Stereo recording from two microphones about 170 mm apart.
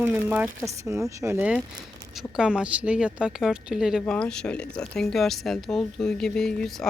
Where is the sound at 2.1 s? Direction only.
Centre (ahead or behind).